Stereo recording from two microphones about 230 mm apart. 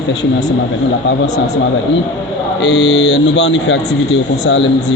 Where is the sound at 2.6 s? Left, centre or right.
Left.